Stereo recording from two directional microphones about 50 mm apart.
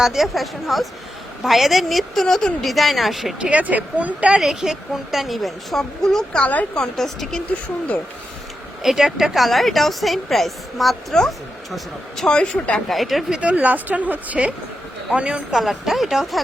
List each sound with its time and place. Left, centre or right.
0.0 s speech: centre
3.5 s speech: right
4.4 s speech: centre
6.4 s a woman's voice: left
6.7 s a woman's voice: centre
8.8 s a woman's voice: centre
12.2 s a woman's voice: centre
12.9 s speech: centre
13.3 s speech: right
15.9 s speech: centre